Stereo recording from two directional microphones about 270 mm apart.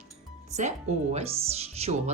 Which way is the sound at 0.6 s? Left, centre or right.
Right.